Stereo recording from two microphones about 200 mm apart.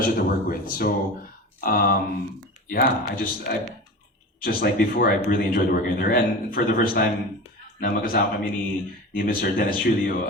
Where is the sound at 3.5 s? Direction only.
50° left (ahead or behind).